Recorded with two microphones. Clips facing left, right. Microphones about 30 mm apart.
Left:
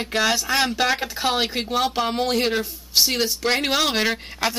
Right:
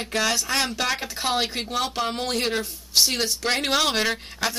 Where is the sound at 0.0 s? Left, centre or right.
Centre.